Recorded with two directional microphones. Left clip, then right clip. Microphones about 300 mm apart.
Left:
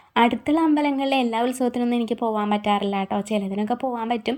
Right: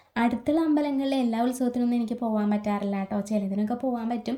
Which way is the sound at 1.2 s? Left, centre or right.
Left.